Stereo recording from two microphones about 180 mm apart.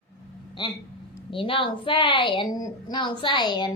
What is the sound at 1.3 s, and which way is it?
A woman's voice, 30° left (ahead or behind).